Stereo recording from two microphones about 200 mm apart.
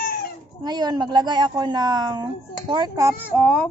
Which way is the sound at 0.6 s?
20° right (ahead or behind).